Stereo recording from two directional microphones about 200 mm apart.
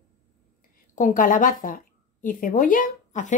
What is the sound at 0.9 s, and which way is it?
Speech, 40° left (ahead or behind).